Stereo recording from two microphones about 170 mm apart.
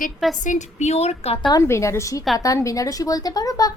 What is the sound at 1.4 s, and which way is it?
A woman's voice, 20° left (ahead or behind).